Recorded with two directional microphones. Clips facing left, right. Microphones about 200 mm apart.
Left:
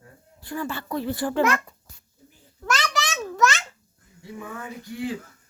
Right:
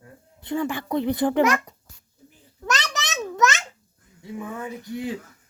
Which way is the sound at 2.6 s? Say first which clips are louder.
Left 1 dB; 20° right (ahead or behind).